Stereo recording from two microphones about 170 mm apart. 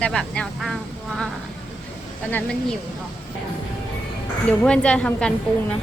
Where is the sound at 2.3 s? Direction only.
5° left (ahead or behind).